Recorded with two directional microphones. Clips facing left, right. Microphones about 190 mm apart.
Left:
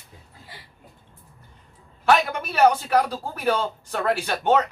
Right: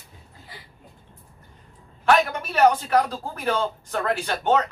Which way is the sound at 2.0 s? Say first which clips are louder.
Even; 10° left (ahead or behind).